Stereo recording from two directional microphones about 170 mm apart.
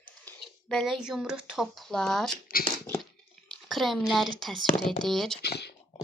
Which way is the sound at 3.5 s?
Centre (ahead or behind).